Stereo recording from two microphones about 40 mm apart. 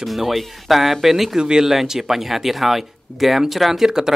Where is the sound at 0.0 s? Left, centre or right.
Centre.